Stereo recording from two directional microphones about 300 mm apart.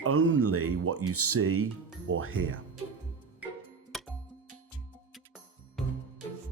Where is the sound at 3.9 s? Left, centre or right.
Centre.